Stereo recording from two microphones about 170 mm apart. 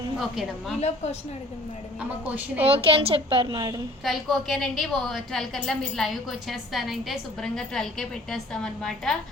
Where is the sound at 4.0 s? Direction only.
Centre (ahead or behind).